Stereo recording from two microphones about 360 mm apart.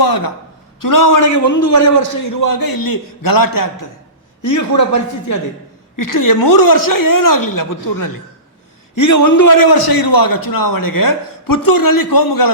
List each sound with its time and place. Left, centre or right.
0.0 s a sound: left
0.8 s a man's voice: left
2.4 s a man's voice: left
4.4 s speech: left
6.0 s a man's voice: left